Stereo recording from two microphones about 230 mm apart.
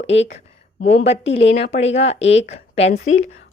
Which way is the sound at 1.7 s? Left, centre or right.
Left.